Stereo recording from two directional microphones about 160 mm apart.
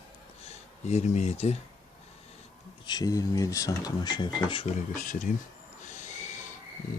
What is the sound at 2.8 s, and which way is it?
Speech, 25° left (ahead or behind).